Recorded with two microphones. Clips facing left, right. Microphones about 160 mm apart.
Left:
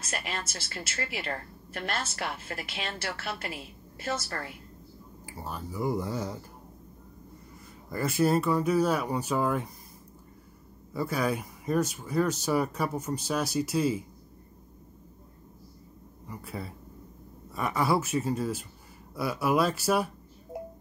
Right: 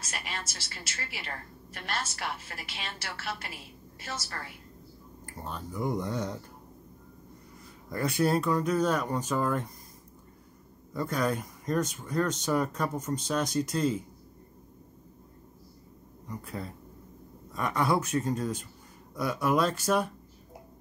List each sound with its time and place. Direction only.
0.0 s a woman's voice: 55° left (ahead or behind)
5.2 s speech: 5° left (ahead or behind)
7.9 s speech: 5° left (ahead or behind)
10.9 s speech: 5° left (ahead or behind)
16.3 s speech: 5° left (ahead or behind)